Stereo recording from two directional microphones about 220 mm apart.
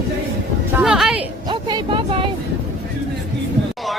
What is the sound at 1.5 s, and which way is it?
Speech, 20° right (ahead or behind).